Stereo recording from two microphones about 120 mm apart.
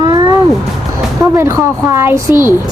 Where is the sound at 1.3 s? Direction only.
25° right (ahead or behind).